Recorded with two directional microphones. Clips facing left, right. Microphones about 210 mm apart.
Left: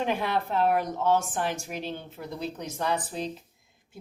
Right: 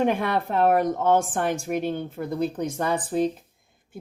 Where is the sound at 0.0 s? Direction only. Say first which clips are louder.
Right 5 dB; 50° right (ahead or behind).